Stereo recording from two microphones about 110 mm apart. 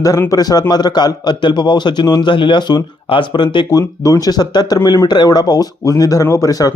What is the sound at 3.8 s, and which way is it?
Speech, 30° left (ahead or behind).